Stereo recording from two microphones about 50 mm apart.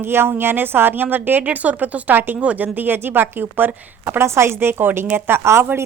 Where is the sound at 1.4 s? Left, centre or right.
Right.